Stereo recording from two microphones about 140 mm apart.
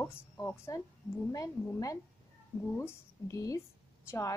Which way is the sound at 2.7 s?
20° left (ahead or behind).